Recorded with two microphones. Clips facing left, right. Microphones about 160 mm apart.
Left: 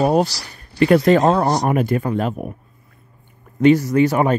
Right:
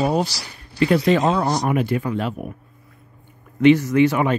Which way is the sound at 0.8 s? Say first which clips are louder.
Left 4 dB; 50° left (ahead or behind).